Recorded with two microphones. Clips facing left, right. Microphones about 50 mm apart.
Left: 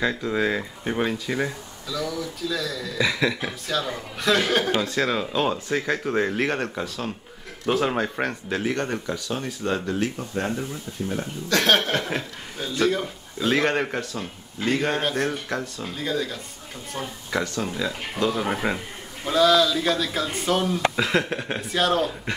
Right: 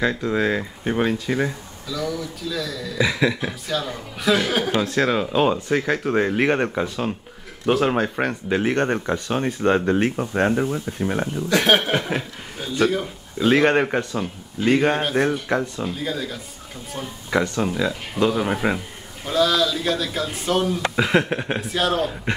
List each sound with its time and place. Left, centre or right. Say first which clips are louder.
0.0 s speech: right 3 dB; centre
4.7 s speech: right 3 dB; right
7.7 s speech: right 3 dB; centre
8.6 s speech: right 5 dB; right
11.4 s a man's voice: right 2 dB; centre
13.5 s speech: right 5 dB; centre
16.0 s speech: left 5 dB; centre
17.3 s speech: right 6 dB; centre
20.9 s speech: right 4 dB; centre
21.5 s speech: left 1 dB; centre